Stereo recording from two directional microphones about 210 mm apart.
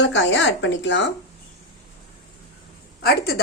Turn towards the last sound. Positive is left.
turn(degrees=45)  # may be behind; listen again after turning